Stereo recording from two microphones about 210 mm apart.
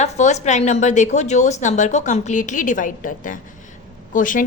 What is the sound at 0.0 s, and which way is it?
A woman's voice, 30° left (ahead or behind).